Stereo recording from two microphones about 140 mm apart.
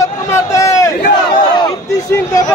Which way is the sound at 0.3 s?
20° left (ahead or behind).